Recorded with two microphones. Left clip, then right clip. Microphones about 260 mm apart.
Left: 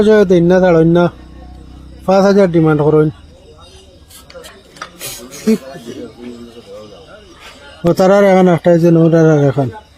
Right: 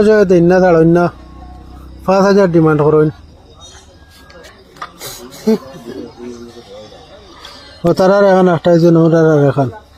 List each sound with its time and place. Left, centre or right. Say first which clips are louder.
0.0 s a man's voice: even; centre
4.9 s a sound: left 1 dB; left
7.8 s a man's voice: even; centre